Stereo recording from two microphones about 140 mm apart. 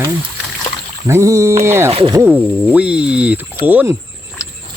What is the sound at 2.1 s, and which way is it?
Speech, 15° right (ahead or behind).